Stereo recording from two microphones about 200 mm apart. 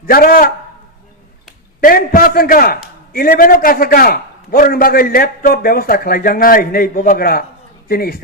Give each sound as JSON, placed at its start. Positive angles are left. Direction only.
{"t": 0.0, "sound": "a man's voice", "side_deg": 45}
{"t": 1.8, "sound": "a man's voice", "side_deg": 45}